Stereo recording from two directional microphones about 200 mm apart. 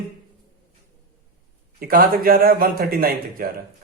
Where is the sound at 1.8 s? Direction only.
45° right (ahead or behind).